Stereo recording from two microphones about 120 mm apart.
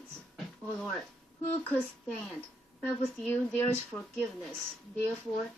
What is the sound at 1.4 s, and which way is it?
Speech, 15° left (ahead or behind).